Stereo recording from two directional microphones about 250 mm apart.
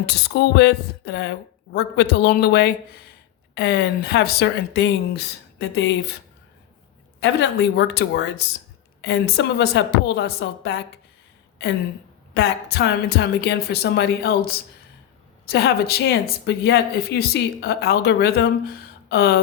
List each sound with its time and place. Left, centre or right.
0.0 s speech: left
7.2 s a woman's voice: left
12.3 s speech: left